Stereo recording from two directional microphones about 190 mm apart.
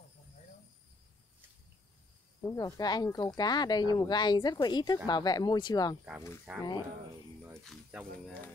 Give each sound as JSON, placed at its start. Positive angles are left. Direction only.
{"t": 2.4, "sound": "speech", "side_deg": 20}
{"t": 6.5, "sound": "speech", "side_deg": -5}